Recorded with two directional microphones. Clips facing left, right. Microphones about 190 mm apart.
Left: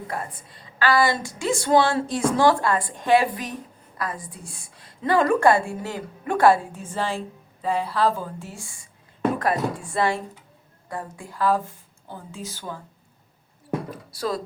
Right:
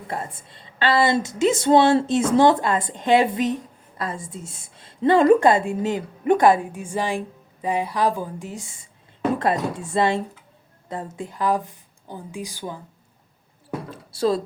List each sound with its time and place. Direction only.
0.1 s a woman's voice: 25° right (ahead or behind)
13.9 s a woman's voice: 25° right (ahead or behind)